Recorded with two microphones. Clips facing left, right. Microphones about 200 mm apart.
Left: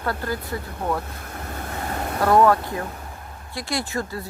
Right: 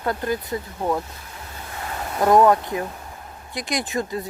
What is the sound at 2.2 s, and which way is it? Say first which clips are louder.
Speech: right 2 dB; 15° right (ahead or behind).